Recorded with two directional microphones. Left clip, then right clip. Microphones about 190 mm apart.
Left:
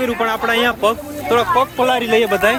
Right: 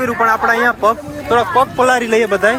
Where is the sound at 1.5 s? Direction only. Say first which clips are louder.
Right 3 dB; 30° right (ahead or behind); by 2.5 s 15° right (ahead or behind).